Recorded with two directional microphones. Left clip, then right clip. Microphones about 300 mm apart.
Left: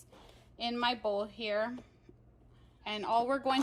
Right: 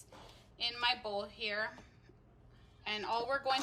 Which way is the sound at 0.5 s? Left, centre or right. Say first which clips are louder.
Left 1 dB; centre.